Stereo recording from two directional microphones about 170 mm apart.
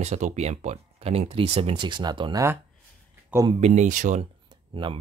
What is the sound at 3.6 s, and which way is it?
Speech, 45° right (ahead or behind).